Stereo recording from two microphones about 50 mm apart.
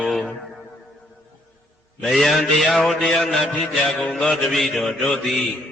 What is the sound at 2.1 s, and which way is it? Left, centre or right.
Mantra, centre.